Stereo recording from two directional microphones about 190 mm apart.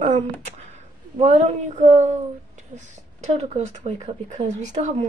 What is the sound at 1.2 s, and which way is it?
Speech, 35° right (ahead or behind).